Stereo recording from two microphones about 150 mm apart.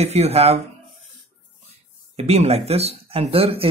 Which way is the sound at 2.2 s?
45° right (ahead or behind).